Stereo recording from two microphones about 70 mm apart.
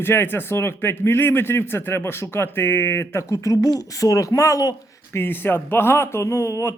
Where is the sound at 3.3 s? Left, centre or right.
Left.